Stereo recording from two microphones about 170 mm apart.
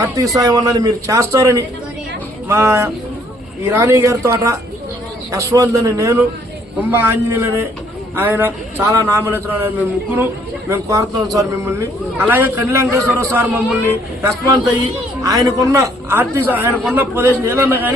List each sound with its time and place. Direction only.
0.0 s a man's voice: 20° right (ahead or behind)